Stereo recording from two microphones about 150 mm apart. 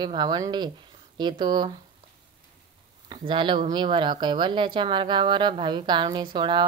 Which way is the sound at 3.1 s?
30° right (ahead or behind).